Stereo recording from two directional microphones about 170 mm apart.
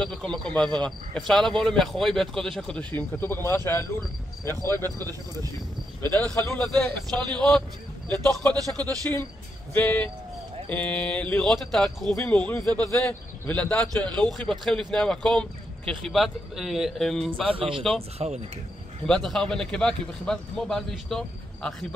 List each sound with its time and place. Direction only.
0.0 s a man's voice: 5° left (ahead or behind)
4.9 s speech: 20° right (ahead or behind)
6.0 s a man's voice: 15° left (ahead or behind)
8.1 s speech: 20° right (ahead or behind)
8.6 s a man's voice: 10° left (ahead or behind)
17.5 s speech: 30° right (ahead or behind)
19.0 s a man's voice: 5° left (ahead or behind)